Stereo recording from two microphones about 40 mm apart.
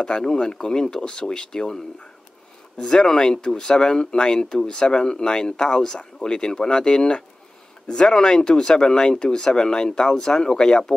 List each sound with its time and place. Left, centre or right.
0.0 s speech: left
2.8 s speech: centre